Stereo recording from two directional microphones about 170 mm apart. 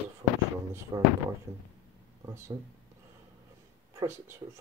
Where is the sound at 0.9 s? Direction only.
25° right (ahead or behind).